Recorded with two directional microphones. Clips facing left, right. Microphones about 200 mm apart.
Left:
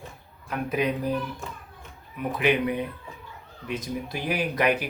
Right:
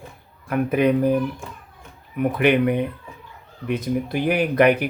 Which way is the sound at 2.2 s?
60° right (ahead or behind).